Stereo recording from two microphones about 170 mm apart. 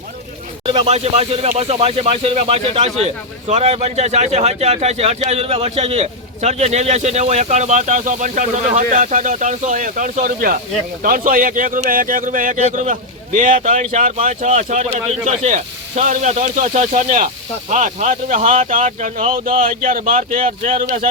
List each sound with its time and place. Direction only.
0.9 s speech: 40° right (ahead or behind)